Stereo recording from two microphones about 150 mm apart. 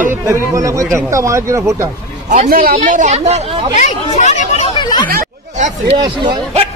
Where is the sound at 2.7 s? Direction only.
55° right (ahead or behind).